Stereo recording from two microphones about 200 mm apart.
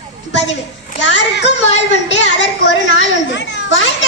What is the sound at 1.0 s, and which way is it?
Child singing, 65° left (ahead or behind).